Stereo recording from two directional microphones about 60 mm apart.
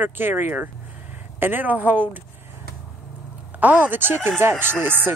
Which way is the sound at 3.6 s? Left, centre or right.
Right.